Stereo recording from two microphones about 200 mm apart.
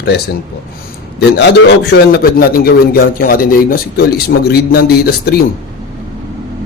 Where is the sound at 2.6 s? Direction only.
50° left (ahead or behind).